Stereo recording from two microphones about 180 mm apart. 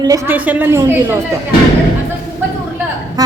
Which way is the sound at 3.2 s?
20° right (ahead or behind).